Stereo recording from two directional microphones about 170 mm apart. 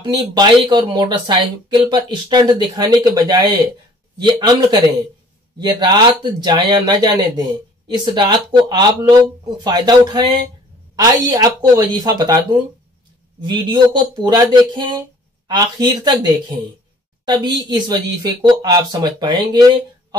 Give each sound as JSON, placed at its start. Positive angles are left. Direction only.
{"t": 0.0, "sound": "speech", "side_deg": -25}
{"t": 13.4, "sound": "speech", "side_deg": -25}